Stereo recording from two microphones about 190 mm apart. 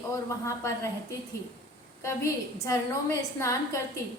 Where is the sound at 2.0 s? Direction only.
15° left (ahead or behind).